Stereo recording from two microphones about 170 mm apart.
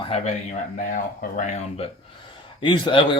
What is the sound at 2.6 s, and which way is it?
Speech, 30° left (ahead or behind).